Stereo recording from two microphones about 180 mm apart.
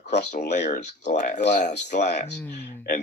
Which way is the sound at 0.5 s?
40° left (ahead or behind).